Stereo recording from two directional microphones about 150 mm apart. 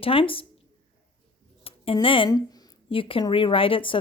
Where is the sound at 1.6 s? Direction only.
40° left (ahead or behind).